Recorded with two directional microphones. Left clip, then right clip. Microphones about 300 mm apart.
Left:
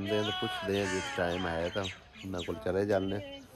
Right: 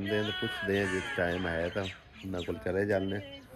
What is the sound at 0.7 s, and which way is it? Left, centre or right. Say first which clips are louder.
Speech: right 2 dB; centre.